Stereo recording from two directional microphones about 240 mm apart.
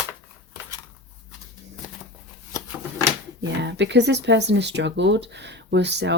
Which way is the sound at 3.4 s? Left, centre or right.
Right.